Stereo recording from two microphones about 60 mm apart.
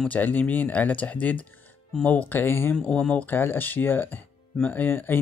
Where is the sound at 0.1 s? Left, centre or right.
Left.